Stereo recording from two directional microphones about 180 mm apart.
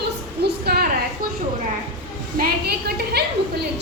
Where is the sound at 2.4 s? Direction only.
60° right (ahead or behind).